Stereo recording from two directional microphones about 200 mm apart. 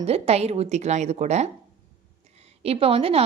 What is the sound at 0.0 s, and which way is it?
A woman's voice, 30° right (ahead or behind).